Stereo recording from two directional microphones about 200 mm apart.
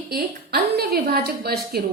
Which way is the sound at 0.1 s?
50° right (ahead or behind).